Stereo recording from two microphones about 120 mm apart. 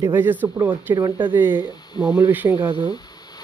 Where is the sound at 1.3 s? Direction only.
15° right (ahead or behind).